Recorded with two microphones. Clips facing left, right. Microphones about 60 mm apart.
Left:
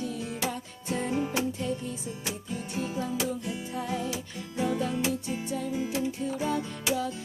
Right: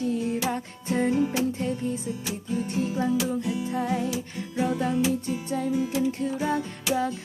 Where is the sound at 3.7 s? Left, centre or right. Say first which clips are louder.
Right 3 dB; right.